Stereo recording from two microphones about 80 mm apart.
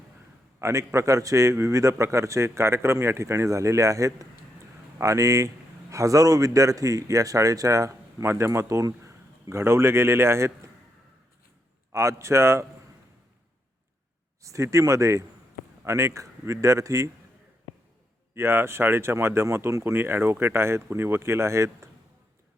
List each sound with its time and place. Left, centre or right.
0.6 s speech: right
11.9 s speech: right
14.4 s speech: right
18.3 s speech: right